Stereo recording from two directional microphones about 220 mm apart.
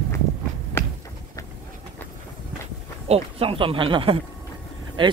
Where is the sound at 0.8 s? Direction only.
10° left (ahead or behind).